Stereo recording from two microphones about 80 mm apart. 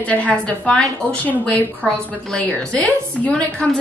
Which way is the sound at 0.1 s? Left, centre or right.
Centre.